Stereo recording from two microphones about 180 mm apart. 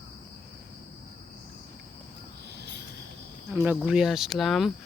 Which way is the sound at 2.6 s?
70° right (ahead or behind).